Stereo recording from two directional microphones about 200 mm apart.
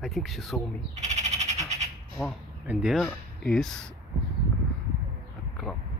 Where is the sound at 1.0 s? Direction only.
35° right (ahead or behind).